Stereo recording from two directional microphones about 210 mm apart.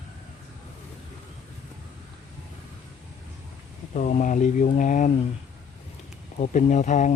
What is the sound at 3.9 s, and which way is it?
Speech, 35° left (ahead or behind).